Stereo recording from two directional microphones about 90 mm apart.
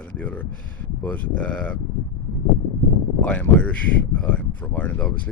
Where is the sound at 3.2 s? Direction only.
15° left (ahead or behind).